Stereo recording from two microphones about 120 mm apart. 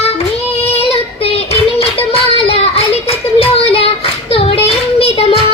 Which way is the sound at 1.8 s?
55° left (ahead or behind).